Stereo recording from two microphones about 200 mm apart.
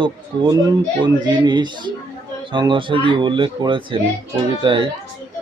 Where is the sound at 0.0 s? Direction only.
25° right (ahead or behind).